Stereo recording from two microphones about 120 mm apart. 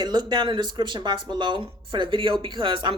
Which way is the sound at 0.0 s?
40° right (ahead or behind).